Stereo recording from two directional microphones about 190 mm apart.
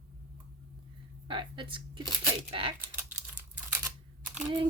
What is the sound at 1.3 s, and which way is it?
Speech, 25° right (ahead or behind).